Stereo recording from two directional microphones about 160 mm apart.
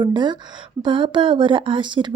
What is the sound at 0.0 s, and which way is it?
Speech, 30° right (ahead or behind).